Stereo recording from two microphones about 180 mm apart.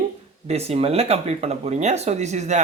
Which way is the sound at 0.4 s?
35° right (ahead or behind).